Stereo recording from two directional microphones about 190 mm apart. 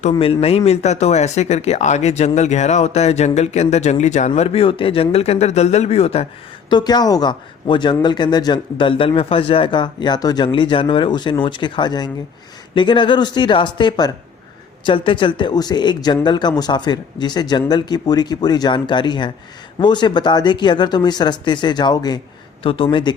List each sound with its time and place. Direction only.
0.1 s speech: 30° left (ahead or behind)
6.7 s speech: 20° left (ahead or behind)